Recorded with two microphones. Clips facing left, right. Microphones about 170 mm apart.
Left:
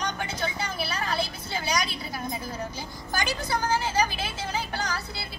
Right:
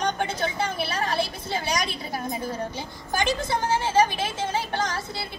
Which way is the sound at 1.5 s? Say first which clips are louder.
Right 2 dB; 50° right (ahead or behind).